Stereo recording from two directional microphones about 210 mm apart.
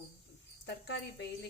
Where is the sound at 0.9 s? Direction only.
55° left (ahead or behind).